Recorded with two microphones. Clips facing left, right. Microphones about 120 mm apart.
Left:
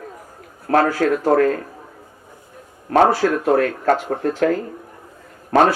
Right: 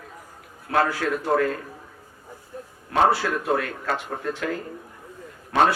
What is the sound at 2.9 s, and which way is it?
A man's voice, 45° left (ahead or behind).